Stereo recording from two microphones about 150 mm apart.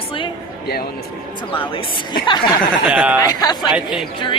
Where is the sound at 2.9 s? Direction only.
10° right (ahead or behind).